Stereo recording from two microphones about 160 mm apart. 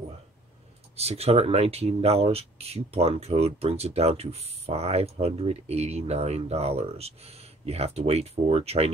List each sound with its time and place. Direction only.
0.9 s speech: 40° right (ahead or behind)